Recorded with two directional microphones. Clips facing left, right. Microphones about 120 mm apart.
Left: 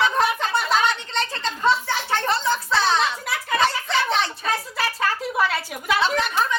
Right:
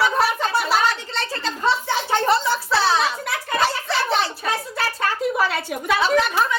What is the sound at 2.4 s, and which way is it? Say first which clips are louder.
Music: right 1 dB; 5° right (ahead or behind).